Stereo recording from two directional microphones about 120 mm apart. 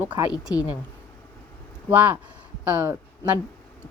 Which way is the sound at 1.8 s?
15° right (ahead or behind).